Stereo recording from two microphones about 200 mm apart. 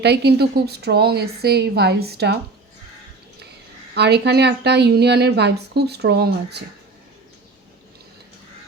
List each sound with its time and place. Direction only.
0.0 s a woman's voice: 55° right (ahead or behind)
3.9 s a woman's voice: 55° right (ahead or behind)